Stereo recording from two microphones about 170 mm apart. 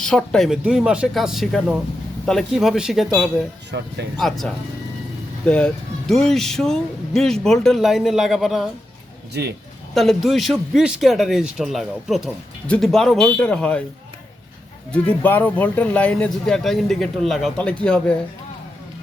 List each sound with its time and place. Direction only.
0.0 s a man's voice: 5° left (ahead or behind)
3.7 s speech: 85° right
4.2 s a man's voice: centre (ahead or behind)
9.3 s speech: 75° right (ahead or behind)
9.9 s a man's voice: centre (ahead or behind)
14.9 s speech: 10° left (ahead or behind)